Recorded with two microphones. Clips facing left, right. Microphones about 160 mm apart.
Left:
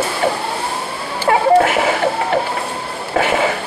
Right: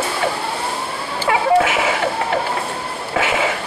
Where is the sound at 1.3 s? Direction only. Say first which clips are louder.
Left 3 dB; 45° left (ahead or behind).